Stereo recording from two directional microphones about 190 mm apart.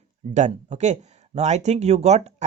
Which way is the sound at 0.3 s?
40° right (ahead or behind).